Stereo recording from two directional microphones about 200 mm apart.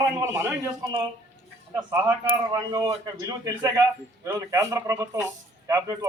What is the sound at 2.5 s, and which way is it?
A man's voice, 20° right (ahead or behind).